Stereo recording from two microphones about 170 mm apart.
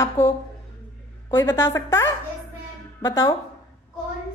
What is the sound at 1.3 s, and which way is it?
A woman's voice, 15° left (ahead or behind).